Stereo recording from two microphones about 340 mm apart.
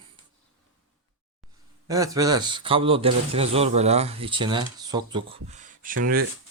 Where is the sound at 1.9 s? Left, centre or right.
Centre.